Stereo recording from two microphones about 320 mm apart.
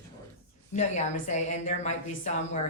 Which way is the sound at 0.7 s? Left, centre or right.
Left.